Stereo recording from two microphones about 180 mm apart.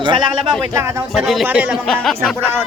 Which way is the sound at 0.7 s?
15° right (ahead or behind).